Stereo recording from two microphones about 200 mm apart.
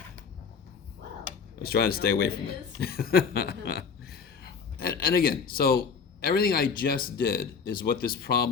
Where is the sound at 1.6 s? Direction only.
50° left (ahead or behind).